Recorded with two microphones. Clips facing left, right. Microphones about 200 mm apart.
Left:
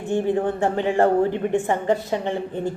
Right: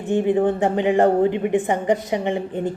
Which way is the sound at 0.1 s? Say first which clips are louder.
Right 3 dB; 20° right (ahead or behind).